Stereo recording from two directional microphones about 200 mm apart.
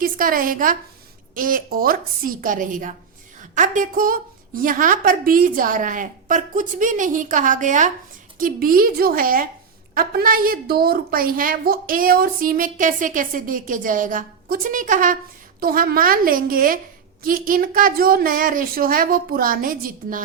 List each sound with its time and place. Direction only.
0.0 s a woman's voice: 45° right (ahead or behind)